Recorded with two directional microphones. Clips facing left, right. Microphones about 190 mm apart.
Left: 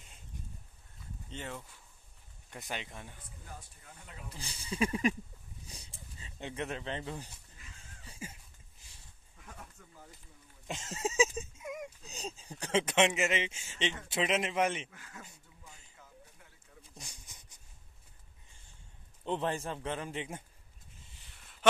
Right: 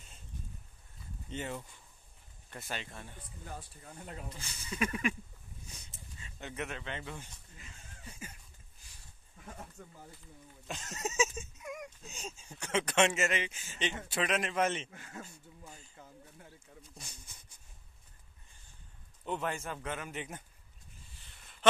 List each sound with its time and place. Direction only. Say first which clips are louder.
1.3 s speech: right 4 dB; 5° right (ahead or behind)
2.5 s speech: left 1 dB; 15° left (ahead or behind)
3.5 s speech: right 7 dB; 40° right (ahead or behind)
4.4 s speech: left 3 dB; 30° left (ahead or behind)
5.7 s a sound: left 2 dB; 30° left (ahead or behind)
9.8 s speech: right 7 dB; 30° right (ahead or behind)
10.7 s speech: left 3 dB; 25° left (ahead or behind)
11.3 s a sound: left 3 dB; 25° left (ahead or behind)
12.1 s speech: left 3 dB; 35° left (ahead or behind)
12.8 s speech: right 1 dB; 20° left (ahead or behind)
14.9 s speech: right 4 dB; 30° right (ahead or behind)
19.2 s speech: left 3 dB; 30° left (ahead or behind)